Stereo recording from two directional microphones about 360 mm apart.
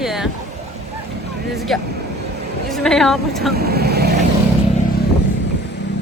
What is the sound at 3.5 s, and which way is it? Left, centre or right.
Vehicle, right.